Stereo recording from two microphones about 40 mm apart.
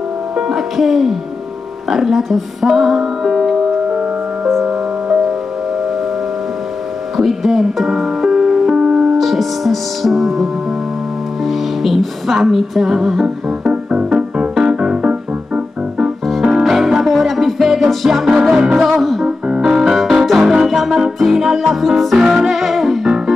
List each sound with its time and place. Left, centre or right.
0.5 s speech: centre
1.9 s music: centre
7.2 s music: centre; by 9.1 s right
9.2 s music: centre
13.7 s music: right
16.5 s music: centre
19.6 s keyboard: centre
20.6 s music: centre
22.2 s music: centre
22.5 s music: centre